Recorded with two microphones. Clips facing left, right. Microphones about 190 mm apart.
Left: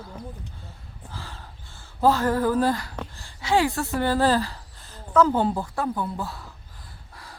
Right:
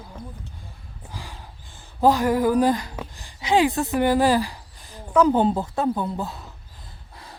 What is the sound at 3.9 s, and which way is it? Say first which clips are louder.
Speech: right 2 dB; 15° right (ahead or behind).